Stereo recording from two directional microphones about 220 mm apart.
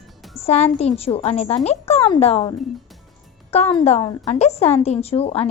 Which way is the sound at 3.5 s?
30° left (ahead or behind).